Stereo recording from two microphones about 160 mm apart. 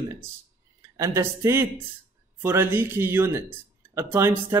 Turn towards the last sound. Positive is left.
turn(degrees=-15)  # may be behind; listen again after turning